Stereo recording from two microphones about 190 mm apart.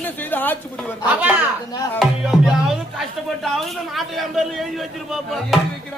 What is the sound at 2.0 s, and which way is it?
A man's voice, centre (ahead or behind).